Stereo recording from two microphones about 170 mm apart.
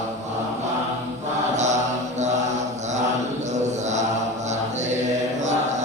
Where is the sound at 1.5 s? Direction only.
45° right (ahead or behind).